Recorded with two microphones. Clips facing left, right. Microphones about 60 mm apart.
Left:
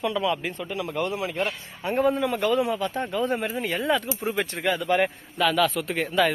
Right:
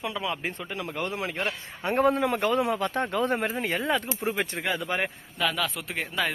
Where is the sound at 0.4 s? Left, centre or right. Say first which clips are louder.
Left 3 dB; right.